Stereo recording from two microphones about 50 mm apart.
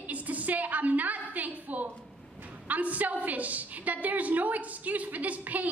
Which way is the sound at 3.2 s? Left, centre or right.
Right.